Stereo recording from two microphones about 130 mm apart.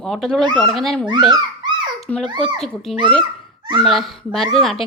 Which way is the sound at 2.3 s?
35° right (ahead or behind).